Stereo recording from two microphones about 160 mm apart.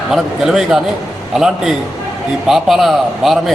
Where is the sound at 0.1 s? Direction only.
5° right (ahead or behind).